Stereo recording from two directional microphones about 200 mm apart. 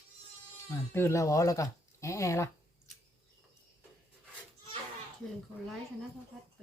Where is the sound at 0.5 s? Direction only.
15° left (ahead or behind).